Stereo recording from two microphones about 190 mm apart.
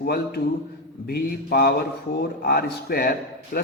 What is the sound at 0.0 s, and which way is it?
A man's voice, 55° left (ahead or behind).